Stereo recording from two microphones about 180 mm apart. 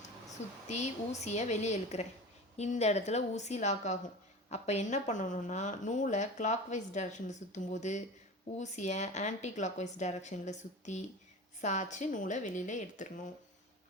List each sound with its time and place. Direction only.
0.7 s speech: 40° left (ahead or behind)